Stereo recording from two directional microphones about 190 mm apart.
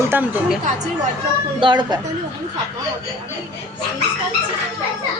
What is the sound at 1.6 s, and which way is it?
Speech, 25° right (ahead or behind).